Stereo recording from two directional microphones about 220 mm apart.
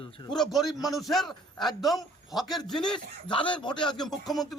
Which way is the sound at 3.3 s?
20° left (ahead or behind).